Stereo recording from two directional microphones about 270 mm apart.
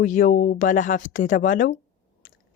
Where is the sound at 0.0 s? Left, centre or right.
Left.